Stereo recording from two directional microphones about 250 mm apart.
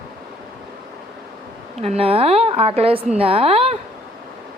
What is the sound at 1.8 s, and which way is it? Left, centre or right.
A woman's voice, right.